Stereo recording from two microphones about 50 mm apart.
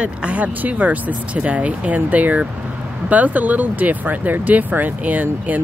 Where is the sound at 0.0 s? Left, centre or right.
Right.